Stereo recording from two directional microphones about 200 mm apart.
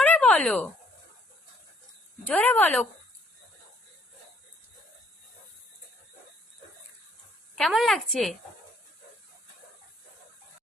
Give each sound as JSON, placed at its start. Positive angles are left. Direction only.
{"t": 0.0, "sound": "a sound", "side_deg": 5}
{"t": 2.2, "sound": "a woman's voice", "side_deg": 10}
{"t": 7.5, "sound": "a woman's voice", "side_deg": 0}